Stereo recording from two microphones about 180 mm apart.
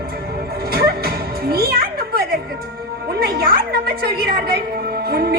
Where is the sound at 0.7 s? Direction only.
60° right (ahead or behind).